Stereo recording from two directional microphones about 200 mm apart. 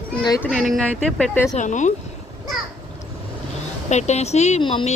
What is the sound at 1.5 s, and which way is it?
Speech, 35° left (ahead or behind).